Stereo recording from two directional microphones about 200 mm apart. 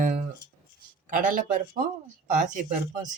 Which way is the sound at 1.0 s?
40° right (ahead or behind).